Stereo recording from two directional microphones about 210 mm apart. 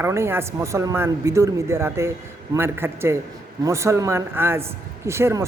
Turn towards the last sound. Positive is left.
turn(degrees=-15)  # may be behind; listen again after turning